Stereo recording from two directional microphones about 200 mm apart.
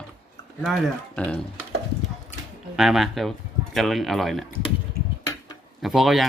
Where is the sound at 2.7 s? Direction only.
Centre (ahead or behind).